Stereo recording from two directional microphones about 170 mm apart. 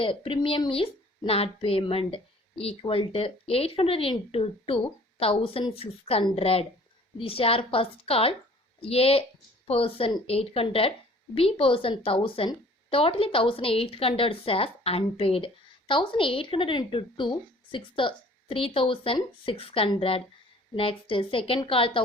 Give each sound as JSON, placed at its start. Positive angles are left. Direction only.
{"t": 0.0, "sound": "a woman's voice", "side_deg": 30}